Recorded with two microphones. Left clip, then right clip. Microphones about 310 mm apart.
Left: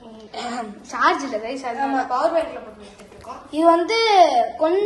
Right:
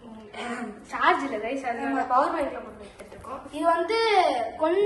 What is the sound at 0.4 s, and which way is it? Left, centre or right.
A child's voice, centre.